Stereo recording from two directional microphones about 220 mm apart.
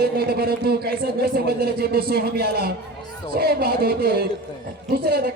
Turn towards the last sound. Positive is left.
turn(degrees=-45)  # may be behind; listen again after turning